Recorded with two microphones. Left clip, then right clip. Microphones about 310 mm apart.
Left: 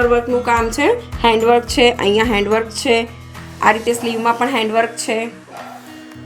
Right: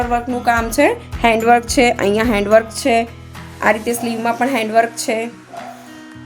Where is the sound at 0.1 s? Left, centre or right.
Right.